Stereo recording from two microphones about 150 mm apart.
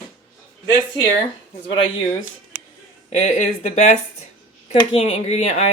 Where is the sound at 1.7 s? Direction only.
35° left (ahead or behind).